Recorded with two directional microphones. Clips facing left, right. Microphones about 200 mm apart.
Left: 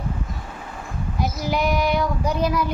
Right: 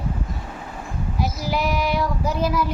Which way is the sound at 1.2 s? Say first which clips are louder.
Left 1 dB; 5° right (ahead or behind).